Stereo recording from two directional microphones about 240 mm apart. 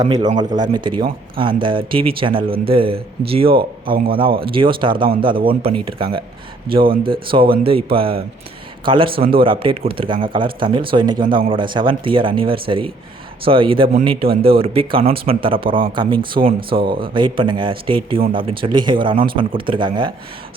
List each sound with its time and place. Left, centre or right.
0.0 s a man's voice: centre